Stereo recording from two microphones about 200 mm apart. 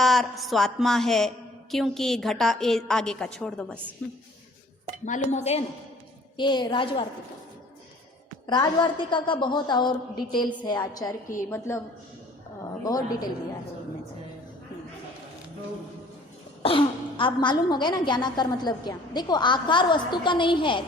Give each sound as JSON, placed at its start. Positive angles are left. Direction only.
{"t": 0.0, "sound": "a woman's voice", "side_deg": 0}
{"t": 5.0, "sound": "a sound", "side_deg": 35}
{"t": 6.3, "sound": "a woman's voice", "side_deg": 25}
{"t": 8.4, "sound": "a woman's voice", "side_deg": 20}
{"t": 16.6, "sound": "a woman's voice", "side_deg": 25}